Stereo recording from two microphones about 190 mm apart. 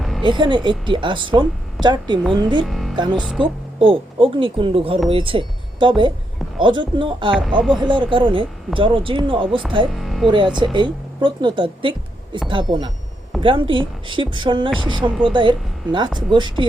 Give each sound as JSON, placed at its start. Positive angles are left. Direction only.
{"t": 0.2, "sound": "a woman's voice", "side_deg": -25}
{"t": 2.6, "sound": "speech", "side_deg": 0}
{"t": 2.9, "sound": "a woman's voice", "side_deg": -25}
{"t": 7.6, "sound": "speech", "side_deg": 0}
{"t": 7.9, "sound": "a woman's voice", "side_deg": -25}
{"t": 9.9, "sound": "speech", "side_deg": 0}
{"t": 10.2, "sound": "a woman's voice", "side_deg": -25}